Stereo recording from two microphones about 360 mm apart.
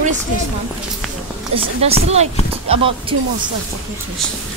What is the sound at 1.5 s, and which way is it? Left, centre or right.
Speech, centre.